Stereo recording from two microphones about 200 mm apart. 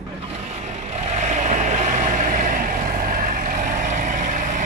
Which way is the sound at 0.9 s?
35° right (ahead or behind).